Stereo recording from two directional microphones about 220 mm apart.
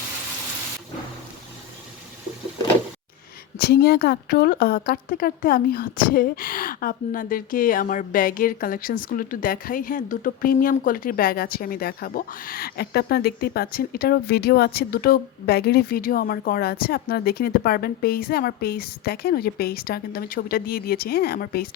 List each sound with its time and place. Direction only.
3.6 s a woman's voice: 45° left (ahead or behind)